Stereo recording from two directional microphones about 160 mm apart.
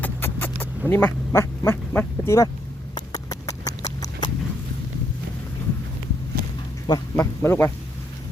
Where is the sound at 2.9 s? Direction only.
25° left (ahead or behind).